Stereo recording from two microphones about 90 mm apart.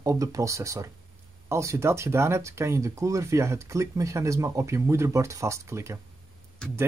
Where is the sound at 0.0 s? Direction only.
40° right (ahead or behind).